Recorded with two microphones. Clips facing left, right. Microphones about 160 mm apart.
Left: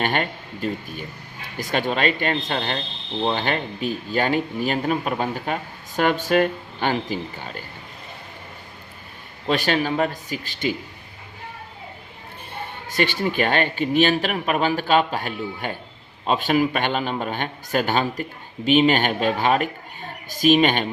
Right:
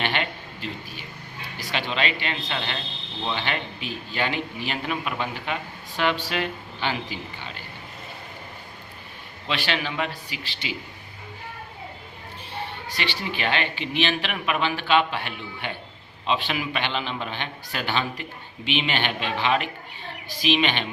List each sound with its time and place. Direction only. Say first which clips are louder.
0.0 s a man's voice: left 4 dB; 45° left (ahead or behind)
9.5 s a man's voice: left 7 dB; 45° left (ahead or behind)
12.5 s a man's voice: left 8 dB; 50° left (ahead or behind)